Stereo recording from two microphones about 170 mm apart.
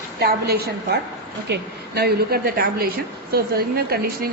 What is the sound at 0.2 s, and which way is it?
Speech, 65° right (ahead or behind).